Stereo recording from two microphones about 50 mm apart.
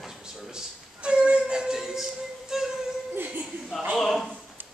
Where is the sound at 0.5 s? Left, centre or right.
Right.